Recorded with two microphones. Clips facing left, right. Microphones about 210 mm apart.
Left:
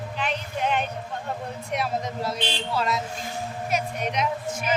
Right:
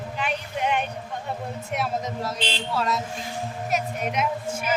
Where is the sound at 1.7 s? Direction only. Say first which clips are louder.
Even; centre (ahead or behind).